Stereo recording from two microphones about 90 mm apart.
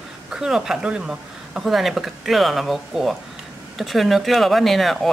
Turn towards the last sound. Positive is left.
turn(degrees=0)  # may be behind; listen again after turning